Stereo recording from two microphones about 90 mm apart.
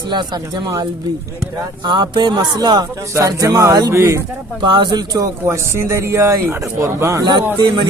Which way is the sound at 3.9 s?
30° right (ahead or behind).